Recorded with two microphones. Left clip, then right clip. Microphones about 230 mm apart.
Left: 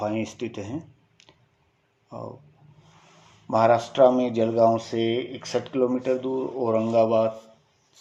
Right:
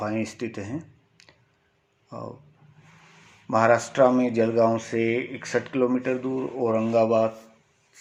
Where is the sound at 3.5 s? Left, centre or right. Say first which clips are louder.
Even; right.